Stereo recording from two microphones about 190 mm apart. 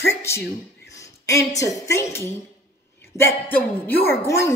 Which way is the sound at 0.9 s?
15° left (ahead or behind).